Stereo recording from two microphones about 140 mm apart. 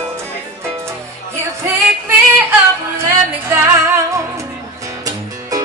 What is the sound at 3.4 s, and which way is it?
Music, 20° right (ahead or behind).